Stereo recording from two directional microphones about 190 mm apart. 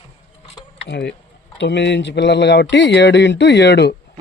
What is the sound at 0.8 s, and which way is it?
Speech, 65° left (ahead or behind).